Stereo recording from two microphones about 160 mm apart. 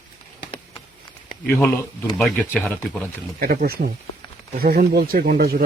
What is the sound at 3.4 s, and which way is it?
Speech, 70° right (ahead or behind).